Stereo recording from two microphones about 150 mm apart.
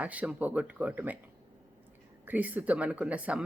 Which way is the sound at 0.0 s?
10° right (ahead or behind).